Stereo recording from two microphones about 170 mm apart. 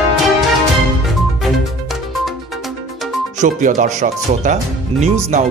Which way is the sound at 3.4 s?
50° right (ahead or behind).